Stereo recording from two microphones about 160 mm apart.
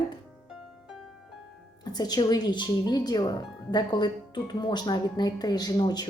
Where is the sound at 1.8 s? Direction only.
25° left (ahead or behind).